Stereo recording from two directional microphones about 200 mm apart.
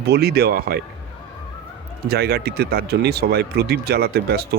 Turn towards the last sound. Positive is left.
turn(degrees=-50)  # may be behind; listen again after turning